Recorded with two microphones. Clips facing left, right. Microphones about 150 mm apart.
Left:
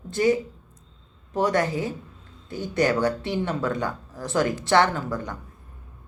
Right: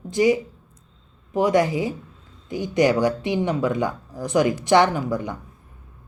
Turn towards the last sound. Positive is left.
turn(degrees=-15)  # may be behind; listen again after turning